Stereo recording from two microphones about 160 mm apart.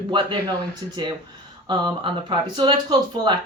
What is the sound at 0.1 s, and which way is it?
Speech, 30° right (ahead or behind).